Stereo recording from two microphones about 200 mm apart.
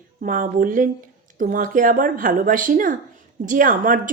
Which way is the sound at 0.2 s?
40° right (ahead or behind).